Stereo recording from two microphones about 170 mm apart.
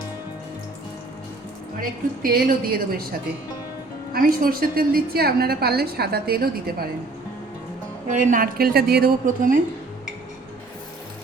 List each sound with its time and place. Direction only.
1.8 s a woman's voice: 55° right (ahead or behind)
8.0 s a woman's voice: 50° right (ahead or behind)